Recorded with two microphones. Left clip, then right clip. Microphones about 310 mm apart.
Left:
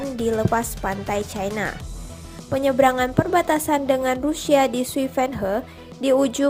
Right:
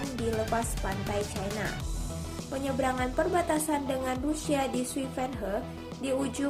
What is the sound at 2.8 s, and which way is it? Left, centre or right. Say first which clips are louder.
A woman's voice: left 9 dB; left.